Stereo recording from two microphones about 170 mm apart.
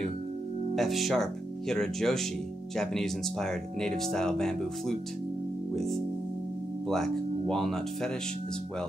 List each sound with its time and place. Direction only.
0.7 s speech: centre (ahead or behind)
6.9 s speech: centre (ahead or behind)